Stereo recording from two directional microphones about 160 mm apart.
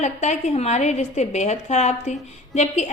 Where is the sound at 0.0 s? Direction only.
45° left (ahead or behind).